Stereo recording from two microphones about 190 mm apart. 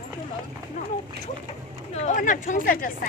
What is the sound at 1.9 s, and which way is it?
Speech, 40° left (ahead or behind).